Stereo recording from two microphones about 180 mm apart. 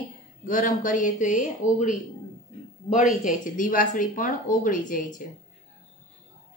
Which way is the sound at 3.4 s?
45° left (ahead or behind).